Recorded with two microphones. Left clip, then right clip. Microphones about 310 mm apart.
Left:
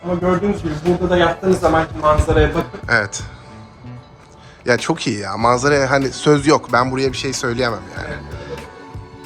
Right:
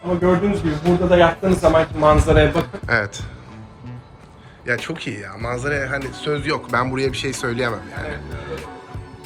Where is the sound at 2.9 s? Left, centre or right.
Centre.